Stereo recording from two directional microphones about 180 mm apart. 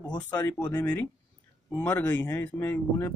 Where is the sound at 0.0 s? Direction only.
25° left (ahead or behind).